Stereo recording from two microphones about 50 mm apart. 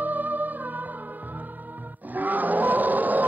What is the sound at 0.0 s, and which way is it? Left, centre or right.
Music, right.